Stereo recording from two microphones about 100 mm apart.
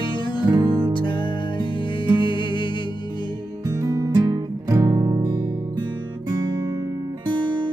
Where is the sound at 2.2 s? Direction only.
55° left (ahead or behind).